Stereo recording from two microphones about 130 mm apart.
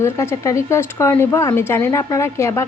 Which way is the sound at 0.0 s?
20° left (ahead or behind).